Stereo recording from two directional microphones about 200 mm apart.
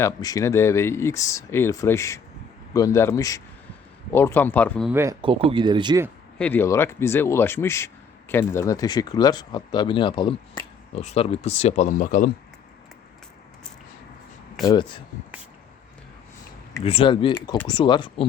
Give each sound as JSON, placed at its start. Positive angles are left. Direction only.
{"t": 0.0, "sound": "speech", "side_deg": 20}
{"t": 4.9, "sound": "speech", "side_deg": -10}
{"t": 5.2, "sound": "speech", "side_deg": -25}
{"t": 6.4, "sound": "speech", "side_deg": 10}
{"t": 14.6, "sound": "speech", "side_deg": 20}
{"t": 16.8, "sound": "speech", "side_deg": 25}